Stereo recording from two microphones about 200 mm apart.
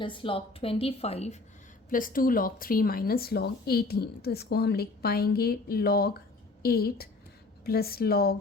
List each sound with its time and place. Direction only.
0.0 s a woman's voice: 25° left (ahead or behind)
1.9 s speech: 45° left (ahead or behind)